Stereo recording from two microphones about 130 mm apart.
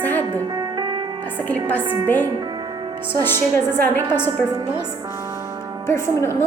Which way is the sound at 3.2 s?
15° left (ahead or behind).